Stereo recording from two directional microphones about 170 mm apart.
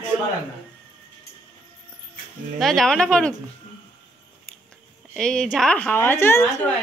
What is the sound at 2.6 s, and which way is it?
Speech, centre (ahead or behind).